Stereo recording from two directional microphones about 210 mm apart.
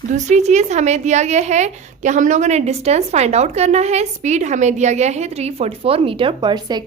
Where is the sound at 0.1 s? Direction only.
35° right (ahead or behind).